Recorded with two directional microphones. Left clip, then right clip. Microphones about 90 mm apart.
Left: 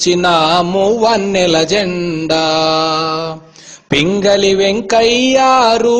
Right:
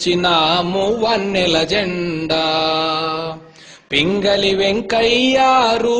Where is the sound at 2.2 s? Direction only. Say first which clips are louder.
Left 4 dB; 50° left (ahead or behind).